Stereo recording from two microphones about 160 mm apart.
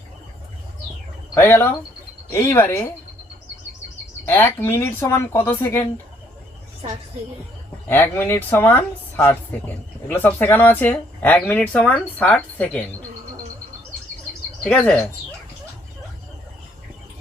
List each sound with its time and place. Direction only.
1.4 s speech: 15° left (ahead or behind)
4.3 s speech: 15° left (ahead or behind)
7.9 s speech: 15° left (ahead or behind)
14.6 s speech: 5° left (ahead or behind)